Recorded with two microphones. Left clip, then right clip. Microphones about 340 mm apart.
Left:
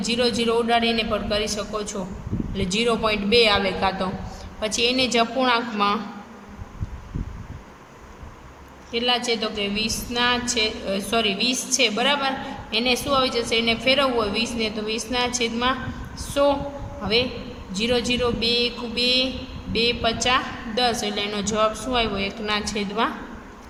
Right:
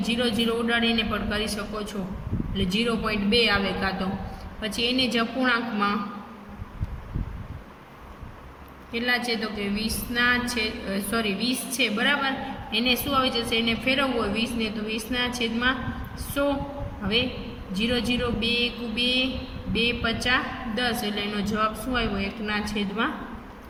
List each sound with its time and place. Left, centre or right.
0.0 s a woman's voice: centre
8.9 s a woman's voice: centre
17.7 s a woman's voice: centre